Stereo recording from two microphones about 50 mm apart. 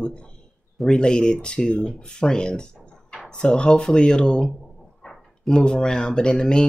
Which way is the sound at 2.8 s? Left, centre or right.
Centre.